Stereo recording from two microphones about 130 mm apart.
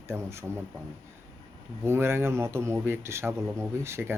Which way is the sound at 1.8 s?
20° right (ahead or behind).